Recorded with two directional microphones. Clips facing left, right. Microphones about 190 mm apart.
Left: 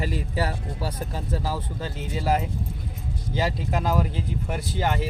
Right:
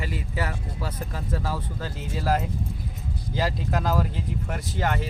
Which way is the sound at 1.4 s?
Centre (ahead or behind).